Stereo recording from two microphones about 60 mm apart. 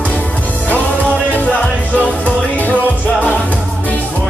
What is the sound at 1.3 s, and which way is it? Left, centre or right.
Music, left.